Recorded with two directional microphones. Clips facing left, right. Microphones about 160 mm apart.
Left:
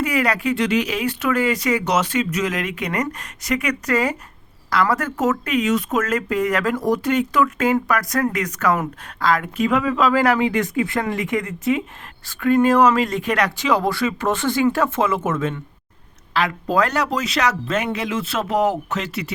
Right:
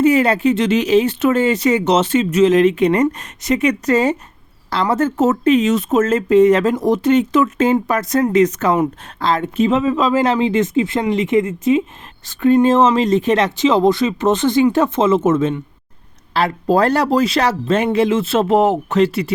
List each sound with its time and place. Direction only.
0.0 s speech: 25° right (ahead or behind)
16.3 s speech: 35° right (ahead or behind)